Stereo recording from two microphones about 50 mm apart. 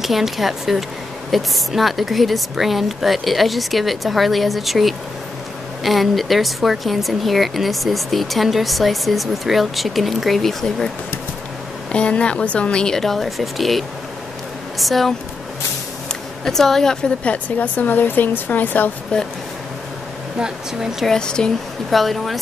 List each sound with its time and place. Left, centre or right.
0.0 s speech: centre
11.9 s a woman's voice: left; by 15.1 s centre
16.4 s a woman's voice: centre
17.2 s speech: left
19.1 s speech: left
20.3 s speech: centre
21.1 s a woman's voice: centre
21.9 s speech: centre